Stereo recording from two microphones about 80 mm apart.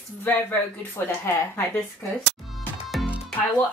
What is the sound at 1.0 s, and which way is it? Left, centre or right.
Speech, left.